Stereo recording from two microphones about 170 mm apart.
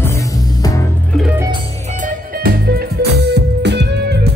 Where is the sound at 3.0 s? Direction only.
75° right (ahead or behind).